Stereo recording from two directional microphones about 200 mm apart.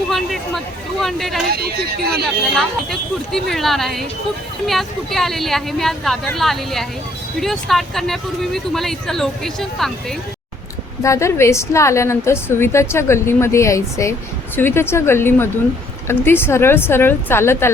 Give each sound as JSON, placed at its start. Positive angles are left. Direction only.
{"t": 0.1, "sound": "speech", "side_deg": 0}
{"t": 1.5, "sound": "speech", "side_deg": -50}
{"t": 2.2, "sound": "speech", "side_deg": 0}
{"t": 11.0, "sound": "a woman's voice", "side_deg": 15}